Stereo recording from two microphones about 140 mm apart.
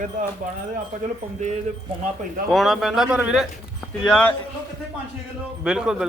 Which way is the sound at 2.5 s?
Centre (ahead or behind).